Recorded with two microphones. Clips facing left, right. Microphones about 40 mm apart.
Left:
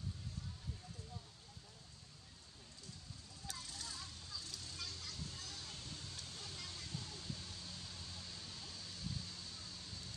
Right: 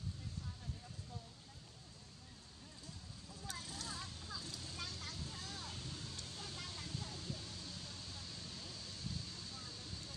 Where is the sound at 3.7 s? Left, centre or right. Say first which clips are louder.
Right 3 dB; centre.